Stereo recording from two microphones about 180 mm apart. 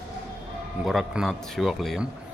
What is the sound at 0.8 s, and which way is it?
Speech, centre (ahead or behind).